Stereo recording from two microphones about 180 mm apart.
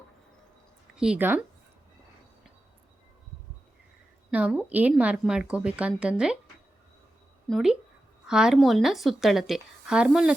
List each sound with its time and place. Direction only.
0.9 s a woman's voice: 5° right (ahead or behind)
4.3 s a woman's voice: 5° right (ahead or behind)
7.4 s a woman's voice: centre (ahead or behind)